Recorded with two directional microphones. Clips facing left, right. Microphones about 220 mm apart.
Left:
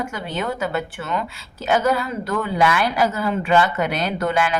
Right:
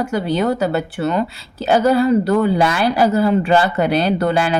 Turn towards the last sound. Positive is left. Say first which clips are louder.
# right 5 dB
turn(degrees=-35)  # may be behind; listen again after turning